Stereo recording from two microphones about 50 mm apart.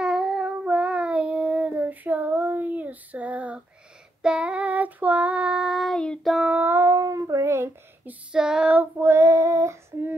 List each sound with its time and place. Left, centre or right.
0.0 s child singing: centre
0.7 s child singing: right
5.7 s child singing: centre
6.6 s music: right
7.1 s child singing: right
8.3 s female singing: centre
8.9 s child singing: right